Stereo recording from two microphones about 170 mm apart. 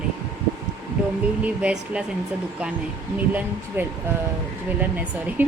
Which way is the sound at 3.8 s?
15° right (ahead or behind).